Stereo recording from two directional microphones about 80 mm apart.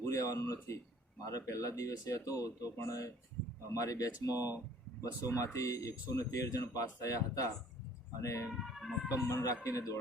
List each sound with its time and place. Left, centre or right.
0.0 s speech: left
8.5 s speech: centre
9.2 s speech: left